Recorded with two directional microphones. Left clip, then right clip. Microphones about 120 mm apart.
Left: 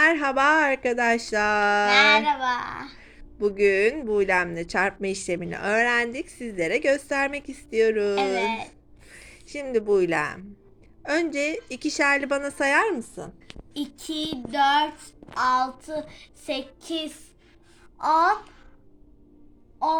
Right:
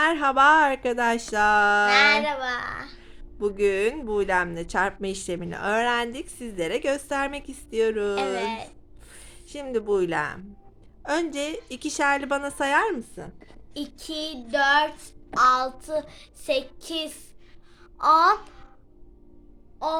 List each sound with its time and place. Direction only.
0.0 s a woman's voice: 10° right (ahead or behind)
1.9 s child singing: 30° right (ahead or behind)
3.3 s a woman's voice: 10° right (ahead or behind)
9.0 s a sound: 5° right (ahead or behind)
9.7 s a woman's voice: 5° right (ahead or behind)
13.7 s child singing: 20° right (ahead or behind)
15.6 s a woman's voice: 10° right (ahead or behind)